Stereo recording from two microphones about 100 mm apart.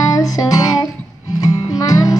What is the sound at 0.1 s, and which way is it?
Music, 35° left (ahead or behind).